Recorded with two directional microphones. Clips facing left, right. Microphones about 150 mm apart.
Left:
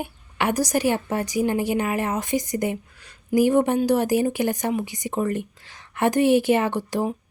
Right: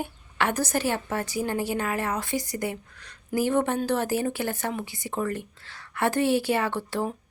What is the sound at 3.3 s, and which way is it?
Speech, 15° left (ahead or behind).